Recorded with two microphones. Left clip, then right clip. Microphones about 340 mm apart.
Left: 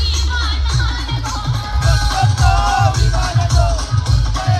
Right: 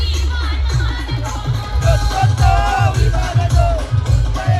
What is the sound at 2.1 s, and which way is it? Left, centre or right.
Music, centre.